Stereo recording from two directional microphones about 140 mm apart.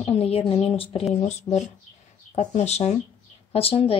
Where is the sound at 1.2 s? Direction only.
55° left (ahead or behind).